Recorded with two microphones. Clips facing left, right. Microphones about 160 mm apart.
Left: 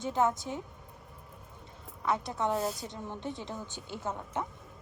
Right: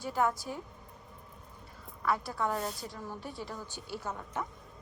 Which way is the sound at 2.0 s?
20° left (ahead or behind).